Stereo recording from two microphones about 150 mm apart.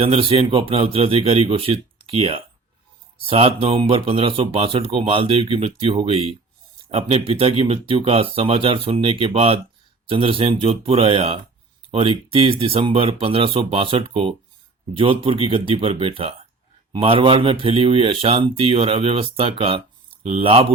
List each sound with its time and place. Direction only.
0.0 s speech: 35° right (ahead or behind)